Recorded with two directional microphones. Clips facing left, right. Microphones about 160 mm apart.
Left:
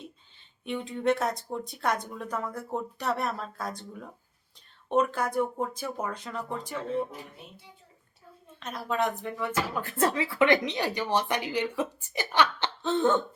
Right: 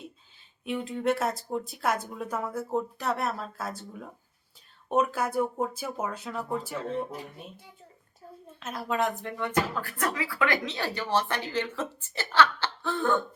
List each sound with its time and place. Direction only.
0.6 s speech: 5° right (ahead or behind)
8.6 s speech: centre (ahead or behind)
9.7 s speech: 25° left (ahead or behind)